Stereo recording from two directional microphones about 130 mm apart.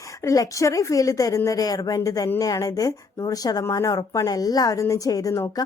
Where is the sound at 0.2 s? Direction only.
25° left (ahead or behind).